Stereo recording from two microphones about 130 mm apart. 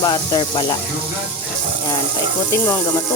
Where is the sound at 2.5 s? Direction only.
20° left (ahead or behind).